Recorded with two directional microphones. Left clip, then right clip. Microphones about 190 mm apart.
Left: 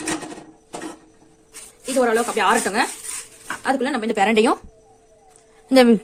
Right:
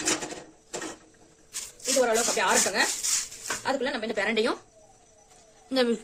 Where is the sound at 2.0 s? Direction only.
45° left (ahead or behind).